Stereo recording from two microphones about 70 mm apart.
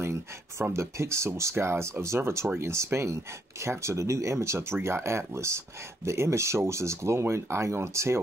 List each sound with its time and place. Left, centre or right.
0.0 s speech: right